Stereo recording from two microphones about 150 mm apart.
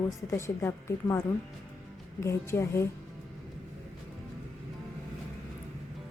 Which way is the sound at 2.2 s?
20° left (ahead or behind).